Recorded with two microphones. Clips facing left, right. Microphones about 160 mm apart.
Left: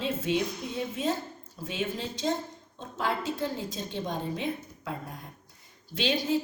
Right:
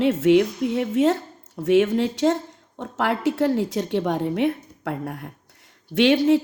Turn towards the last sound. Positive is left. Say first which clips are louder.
# right 11 dB
turn(degrees=-70)  # may be behind; listen again after turning